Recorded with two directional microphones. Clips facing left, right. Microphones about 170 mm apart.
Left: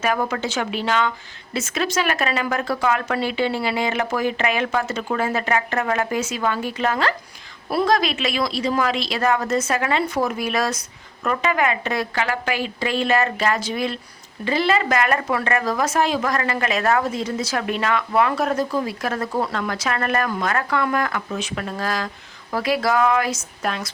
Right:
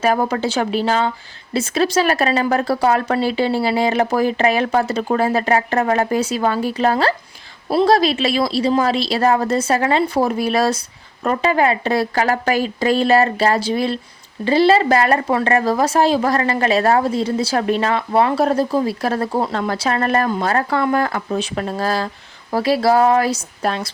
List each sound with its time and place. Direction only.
0.0 s speech: 35° right (ahead or behind)